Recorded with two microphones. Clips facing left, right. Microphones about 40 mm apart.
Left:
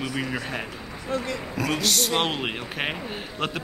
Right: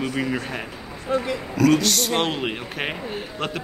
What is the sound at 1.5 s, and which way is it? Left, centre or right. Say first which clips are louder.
Speech: right 7 dB; centre.